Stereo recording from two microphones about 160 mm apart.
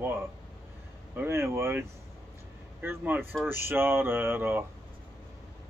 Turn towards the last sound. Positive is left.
turn(degrees=-15)  # may be behind; listen again after turning